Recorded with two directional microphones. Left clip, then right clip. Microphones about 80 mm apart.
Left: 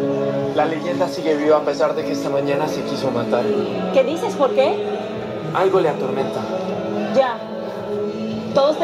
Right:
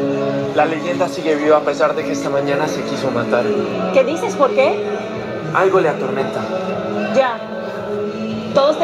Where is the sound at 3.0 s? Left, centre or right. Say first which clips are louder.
Right 3 dB; right.